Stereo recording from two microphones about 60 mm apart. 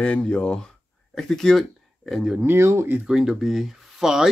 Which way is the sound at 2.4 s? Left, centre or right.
Right.